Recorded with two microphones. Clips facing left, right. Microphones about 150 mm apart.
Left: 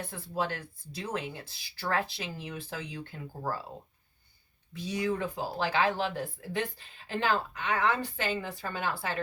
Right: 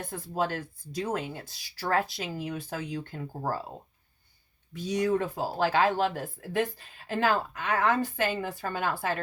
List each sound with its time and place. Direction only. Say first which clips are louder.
0.0 s speech: right 3 dB; 45° right (ahead or behind)
4.9 s speech: right 4 dB; 40° right (ahead or behind)